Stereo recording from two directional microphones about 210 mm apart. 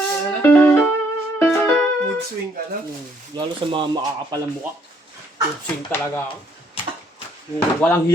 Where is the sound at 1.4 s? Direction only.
10° left (ahead or behind).